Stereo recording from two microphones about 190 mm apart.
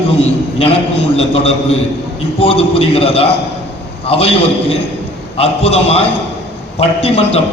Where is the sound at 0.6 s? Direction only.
30° left (ahead or behind).